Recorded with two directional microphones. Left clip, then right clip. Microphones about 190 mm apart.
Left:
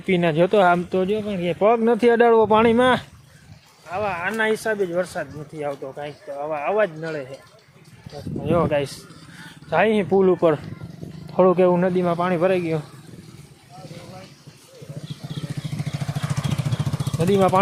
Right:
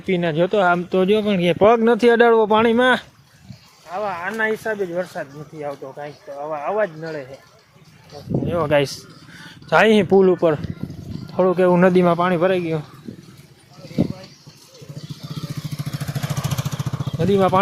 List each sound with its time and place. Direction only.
0.0 s speech: 5° left (ahead or behind)
0.9 s speech: 25° right (ahead or behind); by 7.3 s 10° left (ahead or behind)
8.7 s speech: 25° right (ahead or behind)
10.1 s speech: 5° right (ahead or behind)
11.8 s speech: 25° right (ahead or behind); by 12.8 s 5° right (ahead or behind)
15.9 s vehicle: 55° right (ahead or behind)
17.2 s speech: 5° right (ahead or behind)